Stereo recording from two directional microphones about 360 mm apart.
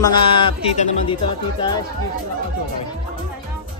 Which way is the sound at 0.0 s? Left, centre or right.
Centre.